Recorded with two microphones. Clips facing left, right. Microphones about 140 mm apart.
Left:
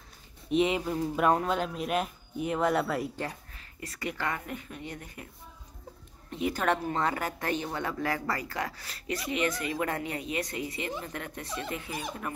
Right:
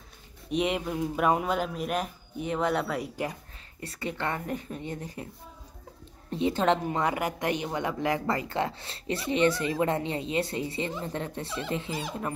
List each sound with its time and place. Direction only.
0.5 s speech: centre (ahead or behind)
3.8 s speech: 30° right (ahead or behind)
6.3 s a woman's voice: 25° right (ahead or behind)